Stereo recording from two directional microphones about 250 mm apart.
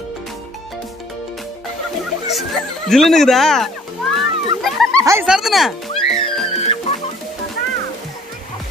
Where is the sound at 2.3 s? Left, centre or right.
Centre.